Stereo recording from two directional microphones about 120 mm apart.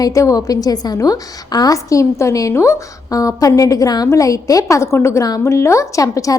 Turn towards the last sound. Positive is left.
turn(degrees=30)  # may be behind; listen again after turning